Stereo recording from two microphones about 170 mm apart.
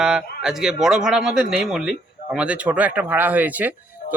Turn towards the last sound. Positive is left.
turn(degrees=-10)  # may be behind; listen again after turning